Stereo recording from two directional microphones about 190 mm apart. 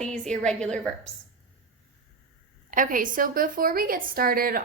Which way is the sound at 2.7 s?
45° right (ahead or behind).